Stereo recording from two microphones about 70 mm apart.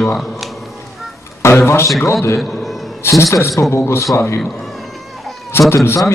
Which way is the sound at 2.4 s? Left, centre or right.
Centre.